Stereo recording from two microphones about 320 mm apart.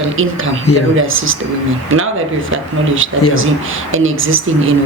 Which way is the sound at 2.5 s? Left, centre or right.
Right.